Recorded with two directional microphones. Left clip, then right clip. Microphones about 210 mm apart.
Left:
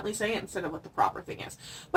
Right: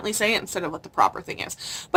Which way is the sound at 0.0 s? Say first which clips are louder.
Right 8 dB; 20° right (ahead or behind).